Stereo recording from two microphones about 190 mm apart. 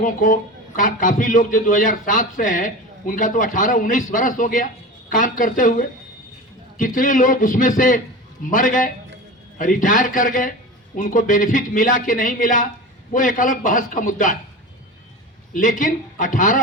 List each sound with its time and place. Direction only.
0.0 s a man's voice: 45° left (ahead or behind)
15.5 s a man's voice: 45° left (ahead or behind)